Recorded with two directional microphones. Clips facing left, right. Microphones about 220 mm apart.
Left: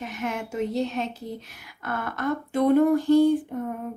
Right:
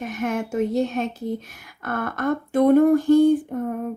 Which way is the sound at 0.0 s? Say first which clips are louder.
Right 5 dB; 50° right (ahead or behind).